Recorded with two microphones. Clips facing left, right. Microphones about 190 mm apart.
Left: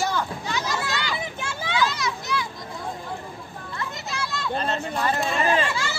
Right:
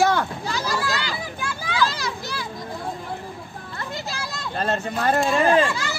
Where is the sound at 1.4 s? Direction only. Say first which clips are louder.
Even; 25° left (ahead or behind).